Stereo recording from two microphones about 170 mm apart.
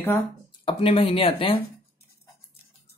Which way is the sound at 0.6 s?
35° left (ahead or behind).